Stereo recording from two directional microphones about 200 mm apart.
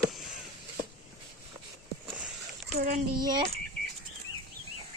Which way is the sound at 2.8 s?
45° right (ahead or behind).